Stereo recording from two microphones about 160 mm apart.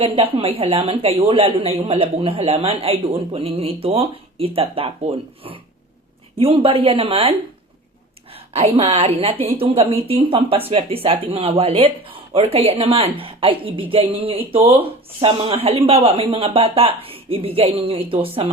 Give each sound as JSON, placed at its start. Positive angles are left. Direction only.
{"t": 0.0, "sound": "speech", "side_deg": -35}
{"t": 8.5, "sound": "speech", "side_deg": -35}